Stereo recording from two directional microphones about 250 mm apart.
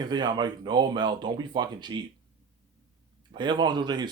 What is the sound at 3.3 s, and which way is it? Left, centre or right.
Speech, centre.